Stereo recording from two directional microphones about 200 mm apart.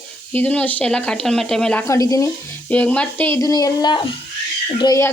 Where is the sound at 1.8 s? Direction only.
15° left (ahead or behind).